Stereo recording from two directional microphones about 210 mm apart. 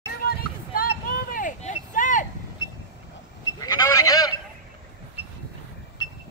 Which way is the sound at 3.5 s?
15° left (ahead or behind).